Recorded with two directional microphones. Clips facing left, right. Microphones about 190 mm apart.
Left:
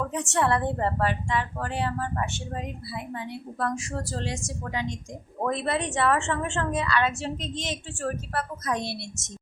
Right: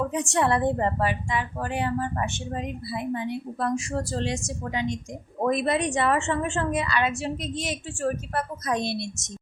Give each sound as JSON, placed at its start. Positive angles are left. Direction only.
{"t": 0.1, "sound": "a woman's voice", "side_deg": -15}